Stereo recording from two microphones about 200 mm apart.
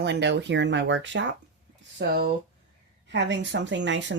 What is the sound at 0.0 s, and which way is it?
Speech, 60° right (ahead or behind).